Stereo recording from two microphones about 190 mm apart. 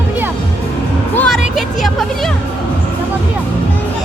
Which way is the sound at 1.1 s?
5° left (ahead or behind).